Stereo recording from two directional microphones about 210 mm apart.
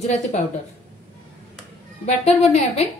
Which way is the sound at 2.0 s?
30° left (ahead or behind).